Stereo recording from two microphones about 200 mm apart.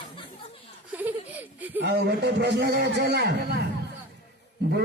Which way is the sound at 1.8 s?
55° right (ahead or behind).